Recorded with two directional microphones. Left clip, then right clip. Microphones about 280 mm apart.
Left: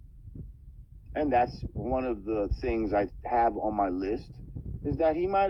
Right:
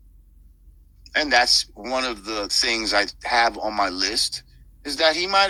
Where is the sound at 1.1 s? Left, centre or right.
Centre.